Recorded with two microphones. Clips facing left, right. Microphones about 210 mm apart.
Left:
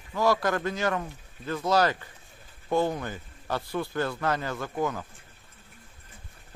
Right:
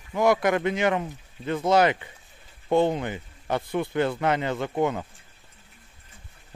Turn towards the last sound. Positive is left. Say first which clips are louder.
# right 5 dB
turn(degrees=-25)  # may be behind; listen again after turning